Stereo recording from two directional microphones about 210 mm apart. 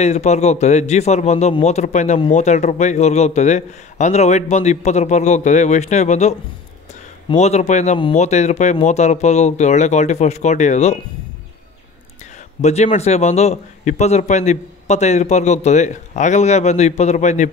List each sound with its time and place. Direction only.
0.0 s a man's voice: 30° left (ahead or behind)
12.6 s a man's voice: 30° left (ahead or behind)